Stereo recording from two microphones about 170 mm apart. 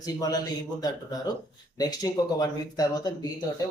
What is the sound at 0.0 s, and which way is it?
Speech, 20° left (ahead or behind).